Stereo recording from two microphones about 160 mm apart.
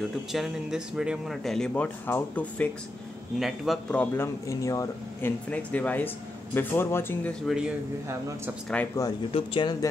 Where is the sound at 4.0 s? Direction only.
15° left (ahead or behind).